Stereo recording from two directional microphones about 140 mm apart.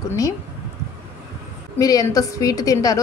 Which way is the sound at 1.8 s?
25° left (ahead or behind).